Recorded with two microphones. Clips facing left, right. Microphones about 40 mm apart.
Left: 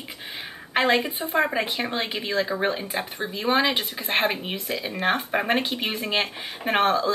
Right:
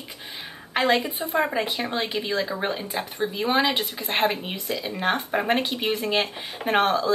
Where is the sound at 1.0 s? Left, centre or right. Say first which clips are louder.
Even; left.